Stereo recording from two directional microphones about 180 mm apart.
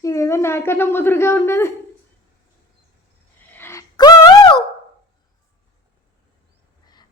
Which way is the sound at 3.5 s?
15° left (ahead or behind).